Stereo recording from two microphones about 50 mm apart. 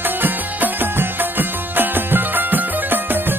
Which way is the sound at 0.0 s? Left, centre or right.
Right.